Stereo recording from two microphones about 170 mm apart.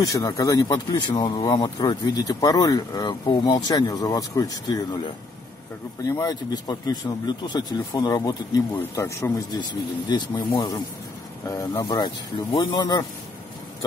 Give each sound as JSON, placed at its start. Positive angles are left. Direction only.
{"t": 0.0, "sound": "speech", "side_deg": 20}
{"t": 6.0, "sound": "speech", "side_deg": 20}
{"t": 11.7, "sound": "speech", "side_deg": 20}